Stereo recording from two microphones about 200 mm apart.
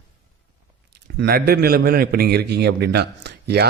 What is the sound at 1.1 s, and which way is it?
A man's voice, 50° right (ahead or behind).